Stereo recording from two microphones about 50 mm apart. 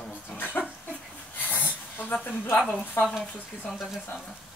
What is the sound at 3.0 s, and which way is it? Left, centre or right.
Speech, left.